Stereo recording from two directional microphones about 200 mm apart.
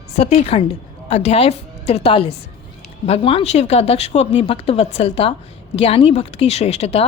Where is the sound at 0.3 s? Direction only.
30° left (ahead or behind).